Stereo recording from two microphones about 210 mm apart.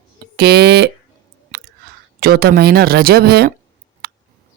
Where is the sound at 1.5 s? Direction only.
50° right (ahead or behind).